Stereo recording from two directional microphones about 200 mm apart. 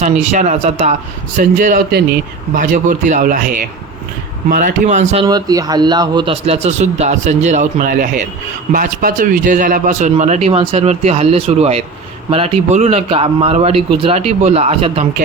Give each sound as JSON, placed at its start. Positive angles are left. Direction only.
{"t": 0.0, "sound": "a man's voice", "side_deg": -35}
{"t": 5.2, "sound": "a man's voice", "side_deg": -20}